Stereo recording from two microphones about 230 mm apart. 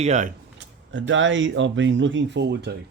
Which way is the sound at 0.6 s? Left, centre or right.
Right.